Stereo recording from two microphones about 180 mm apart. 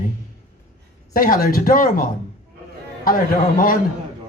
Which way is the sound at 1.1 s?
50° left (ahead or behind).